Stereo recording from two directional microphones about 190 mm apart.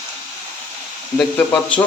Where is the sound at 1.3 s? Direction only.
5° left (ahead or behind).